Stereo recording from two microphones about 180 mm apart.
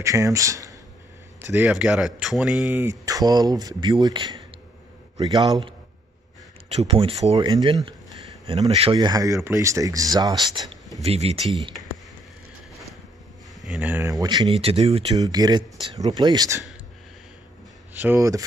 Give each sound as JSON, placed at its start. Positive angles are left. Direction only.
{"t": 0.0, "sound": "speech", "side_deg": -15}
{"t": 6.7, "sound": "speech", "side_deg": -30}
{"t": 8.9, "sound": "speech", "side_deg": -20}
{"t": 11.0, "sound": "speech", "side_deg": -35}
{"t": 13.6, "sound": "speech", "side_deg": -5}
{"t": 15.1, "sound": "speech", "side_deg": -20}
{"t": 17.9, "sound": "speech", "side_deg": -10}